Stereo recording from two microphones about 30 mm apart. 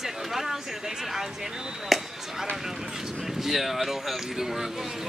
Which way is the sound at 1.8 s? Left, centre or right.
Centre.